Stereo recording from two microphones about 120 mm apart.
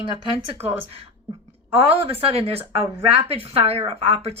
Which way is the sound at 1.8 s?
55° right (ahead or behind).